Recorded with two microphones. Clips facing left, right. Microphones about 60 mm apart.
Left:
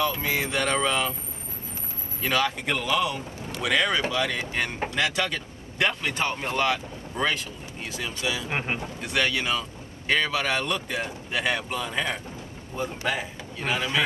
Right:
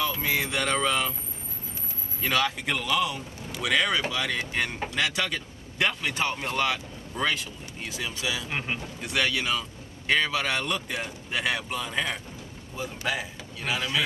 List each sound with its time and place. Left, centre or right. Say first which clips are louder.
0.0 s speech: left 2 dB; centre
2.2 s speech: left 1 dB; centre
8.5 s speech: left 3 dB; left
9.0 s speech: left 1 dB; centre
13.7 s a man's voice: left 2 dB; centre